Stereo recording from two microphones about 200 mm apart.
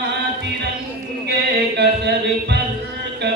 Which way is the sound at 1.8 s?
60° right (ahead or behind).